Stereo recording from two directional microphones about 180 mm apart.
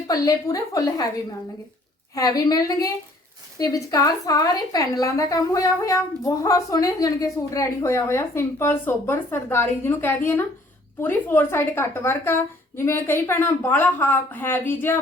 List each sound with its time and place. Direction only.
0.1 s a woman's voice: 20° left (ahead or behind)
2.1 s a woman's voice: 20° left (ahead or behind)